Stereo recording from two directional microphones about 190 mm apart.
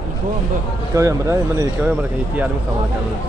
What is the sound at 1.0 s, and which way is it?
Speech, 15° right (ahead or behind).